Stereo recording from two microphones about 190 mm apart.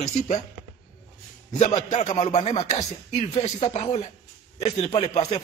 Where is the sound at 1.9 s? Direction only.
40° left (ahead or behind).